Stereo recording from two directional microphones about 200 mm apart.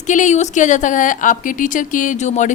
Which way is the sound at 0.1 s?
35° left (ahead or behind).